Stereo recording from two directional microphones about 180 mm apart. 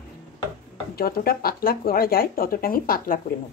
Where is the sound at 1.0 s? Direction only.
55° left (ahead or behind).